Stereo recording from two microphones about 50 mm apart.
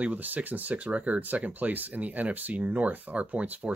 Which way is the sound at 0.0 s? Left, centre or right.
Right.